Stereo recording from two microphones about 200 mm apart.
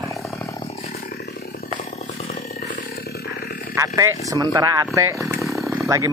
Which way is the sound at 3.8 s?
15° right (ahead or behind).